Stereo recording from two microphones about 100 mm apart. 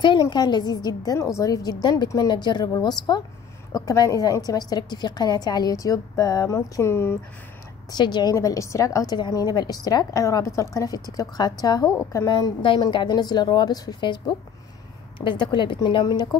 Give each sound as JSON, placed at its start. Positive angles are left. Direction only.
{"t": 0.0, "sound": "a woman's voice", "side_deg": 50}
{"t": 1.1, "sound": "a woman's voice", "side_deg": 30}
{"t": 7.9, "sound": "speech", "side_deg": 45}
{"t": 8.4, "sound": "a woman's voice", "side_deg": 30}
{"t": 11.9, "sound": "a woman's voice", "side_deg": 30}
{"t": 12.3, "sound": "speech", "side_deg": 50}